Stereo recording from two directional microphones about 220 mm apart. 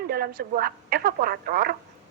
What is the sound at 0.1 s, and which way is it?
A woman's voice, 40° right (ahead or behind).